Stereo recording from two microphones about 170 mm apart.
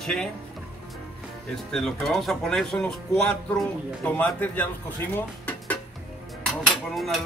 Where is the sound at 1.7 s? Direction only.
5° left (ahead or behind).